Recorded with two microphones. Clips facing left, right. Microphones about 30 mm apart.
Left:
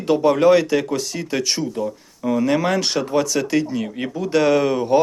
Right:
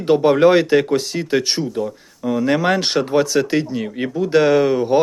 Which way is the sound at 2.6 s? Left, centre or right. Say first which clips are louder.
Right 3 dB; right.